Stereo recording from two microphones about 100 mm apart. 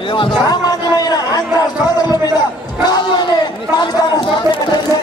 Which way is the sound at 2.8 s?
45° left (ahead or behind).